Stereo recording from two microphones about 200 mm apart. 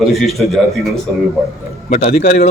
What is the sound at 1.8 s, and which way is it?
Speech, 35° left (ahead or behind).